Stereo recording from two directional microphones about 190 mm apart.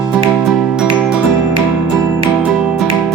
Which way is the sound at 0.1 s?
Centre (ahead or behind).